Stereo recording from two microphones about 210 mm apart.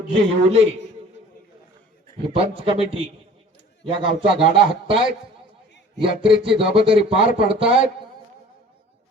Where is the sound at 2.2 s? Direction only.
25° right (ahead or behind).